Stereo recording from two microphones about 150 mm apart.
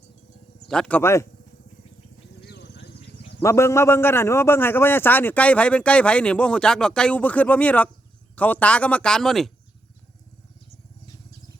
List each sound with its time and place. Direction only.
0.7 s a man's voice: 5° left (ahead or behind)
2.4 s vehicle: 90° left
3.4 s a man's voice: 20° left (ahead or behind); by 9.5 s centre (ahead or behind)